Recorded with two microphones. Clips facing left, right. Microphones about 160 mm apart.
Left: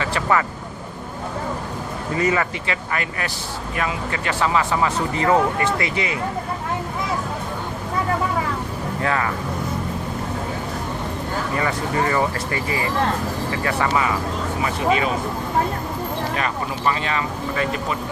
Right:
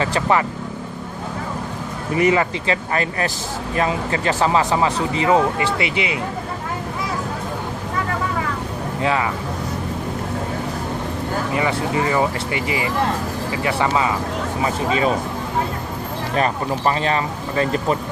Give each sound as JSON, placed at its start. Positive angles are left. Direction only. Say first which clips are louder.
{"t": 2.1, "sound": "speech", "louder": "right 4 dB", "side_deg": -20}
{"t": 4.9, "sound": "speech", "louder": "left 1 dB", "side_deg": -15}
{"t": 9.0, "sound": "speech", "louder": "right 2 dB", "side_deg": -15}
{"t": 11.5, "sound": "speech", "louder": "right 2 dB", "side_deg": -15}
{"t": 14.6, "sound": "speech", "louder": "right 1 dB", "side_deg": -30}
{"t": 16.3, "sound": "speech", "louder": "right 4 dB", "side_deg": -35}